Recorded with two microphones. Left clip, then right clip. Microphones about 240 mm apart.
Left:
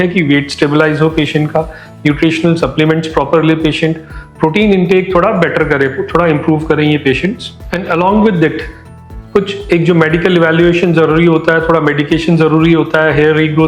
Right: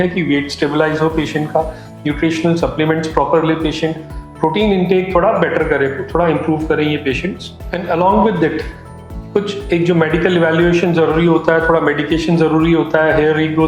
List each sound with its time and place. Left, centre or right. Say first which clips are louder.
0.0 s a man's voice: left 4 dB; left